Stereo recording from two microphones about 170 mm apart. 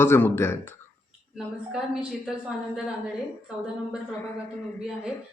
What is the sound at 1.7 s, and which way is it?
Speech, 5° right (ahead or behind).